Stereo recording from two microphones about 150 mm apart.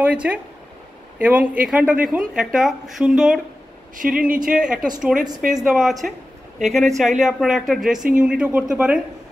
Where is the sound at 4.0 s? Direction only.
65° right (ahead or behind).